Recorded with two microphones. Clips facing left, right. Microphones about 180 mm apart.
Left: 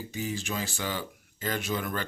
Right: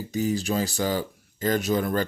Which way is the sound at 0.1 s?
40° right (ahead or behind).